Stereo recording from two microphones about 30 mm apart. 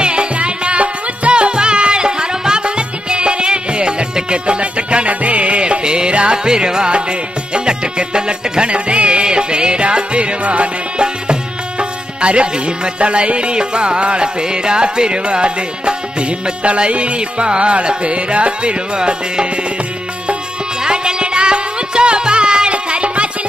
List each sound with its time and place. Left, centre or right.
0.0 s music: right
5.6 s music: right
10.4 s music: right
11.8 s music: right
18.9 s music: right
20.8 s music: right